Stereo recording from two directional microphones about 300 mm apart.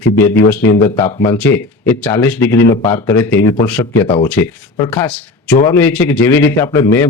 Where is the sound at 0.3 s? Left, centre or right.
Left.